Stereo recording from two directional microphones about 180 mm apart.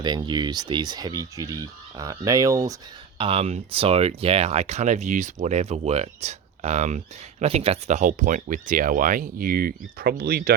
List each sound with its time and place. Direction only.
0.0 s speech: 25° right (ahead or behind)
3.2 s speech: 35° right (ahead or behind); by 10.5 s 55° right (ahead or behind)